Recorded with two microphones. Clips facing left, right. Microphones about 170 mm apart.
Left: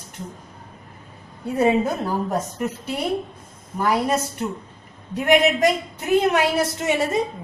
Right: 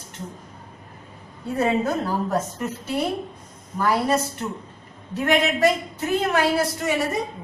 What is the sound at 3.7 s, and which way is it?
A man's voice, 15° left (ahead or behind).